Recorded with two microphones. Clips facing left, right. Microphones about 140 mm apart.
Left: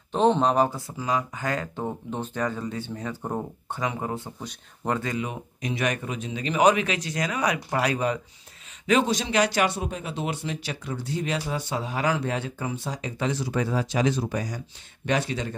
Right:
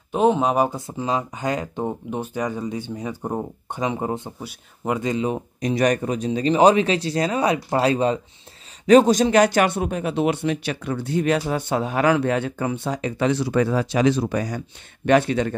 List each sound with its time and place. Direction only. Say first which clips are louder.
0.1 s speech: right 2 dB; 10° right (ahead or behind)
4.4 s speech: right 3 dB; 10° right (ahead or behind)
5.1 s speech: right 7 dB; 30° right (ahead or behind)
8.8 s speech: right 9 dB; 40° right (ahead or behind); by 15.5 s 60° right (ahead or behind)